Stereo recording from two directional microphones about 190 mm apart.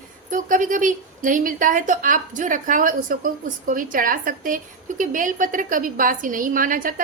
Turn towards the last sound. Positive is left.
turn(degrees=-45)  # may be behind; listen again after turning